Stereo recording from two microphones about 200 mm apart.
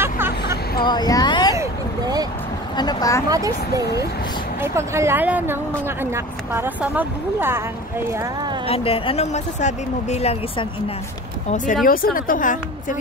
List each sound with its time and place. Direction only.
0.0 s hubbub: 10° right (ahead or behind)
0.8 s speech: 20° left (ahead or behind)
1.6 s a sound: 20° right (ahead or behind)
2.7 s speech: 20° left (ahead or behind)
3.3 s a woman's voice: 15° right (ahead or behind)
8.6 s speech: 30° left (ahead or behind)
11.8 s a woman's voice: 45° left (ahead or behind)